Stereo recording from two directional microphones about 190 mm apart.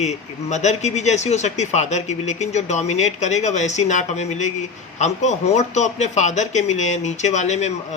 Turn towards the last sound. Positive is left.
turn(degrees=40)  # may be behind; listen again after turning